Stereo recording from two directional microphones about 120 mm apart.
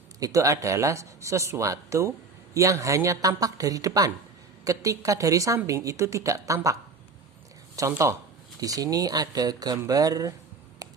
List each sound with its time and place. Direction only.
0.2 s speech: 30° right (ahead or behind)
7.8 s speech: 25° right (ahead or behind)